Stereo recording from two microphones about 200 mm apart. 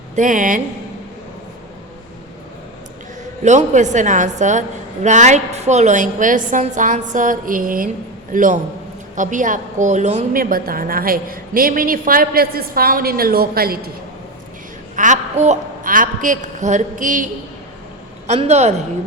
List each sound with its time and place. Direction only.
0.2 s a woman's voice: 40° right (ahead or behind)
3.4 s a woman's voice: 35° right (ahead or behind)
14.9 s a woman's voice: 40° right (ahead or behind)
18.3 s a woman's voice: 35° right (ahead or behind)